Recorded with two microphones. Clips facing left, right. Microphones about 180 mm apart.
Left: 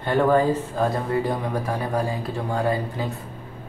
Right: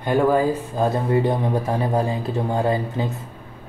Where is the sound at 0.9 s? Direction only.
25° right (ahead or behind).